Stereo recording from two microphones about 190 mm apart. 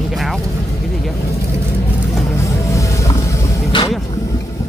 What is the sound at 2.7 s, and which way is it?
Vehicle, 15° left (ahead or behind).